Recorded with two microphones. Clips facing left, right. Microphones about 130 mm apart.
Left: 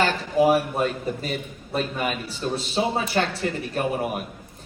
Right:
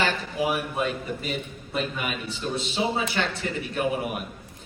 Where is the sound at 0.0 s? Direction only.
40° left (ahead or behind).